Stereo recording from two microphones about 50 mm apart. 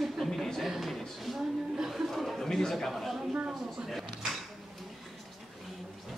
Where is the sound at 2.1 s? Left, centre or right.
Centre.